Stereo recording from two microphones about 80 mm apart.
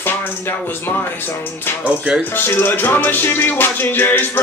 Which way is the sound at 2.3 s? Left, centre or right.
Left.